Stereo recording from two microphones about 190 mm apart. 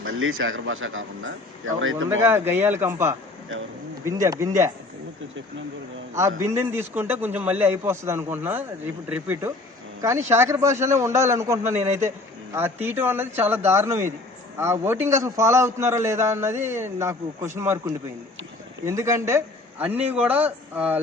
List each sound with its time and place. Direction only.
0.0 s speech: 90° right
2.2 s a man's voice: 10° right (ahead or behind)
6.4 s a man's voice: 15° right (ahead or behind)
18.9 s a man's voice: 15° right (ahead or behind)